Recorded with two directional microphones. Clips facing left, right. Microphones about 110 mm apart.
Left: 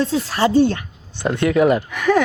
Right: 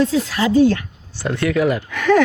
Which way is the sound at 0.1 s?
30° left (ahead or behind).